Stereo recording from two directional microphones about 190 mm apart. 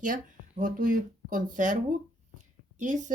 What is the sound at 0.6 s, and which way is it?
Speech, 45° right (ahead or behind).